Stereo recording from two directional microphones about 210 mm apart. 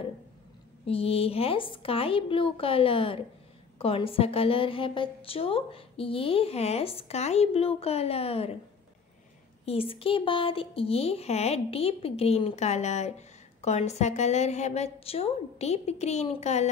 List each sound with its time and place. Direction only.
0.8 s a woman's voice: 25° left (ahead or behind)
9.7 s a woman's voice: 25° left (ahead or behind)